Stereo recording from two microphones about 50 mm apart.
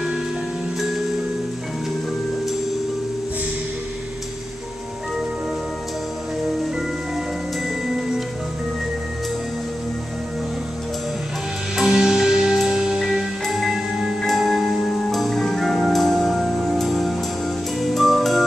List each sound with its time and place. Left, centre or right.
11.7 s music: centre